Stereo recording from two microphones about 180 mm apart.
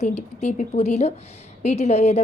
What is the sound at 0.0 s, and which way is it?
A woman's voice, 40° left (ahead or behind).